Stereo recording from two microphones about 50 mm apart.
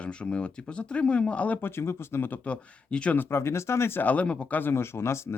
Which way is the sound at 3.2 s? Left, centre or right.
Left.